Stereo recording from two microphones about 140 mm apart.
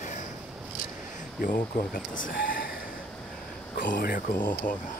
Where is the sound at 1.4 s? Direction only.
75° left (ahead or behind).